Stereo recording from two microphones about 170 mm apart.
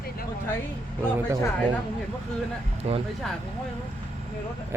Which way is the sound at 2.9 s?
35° right (ahead or behind).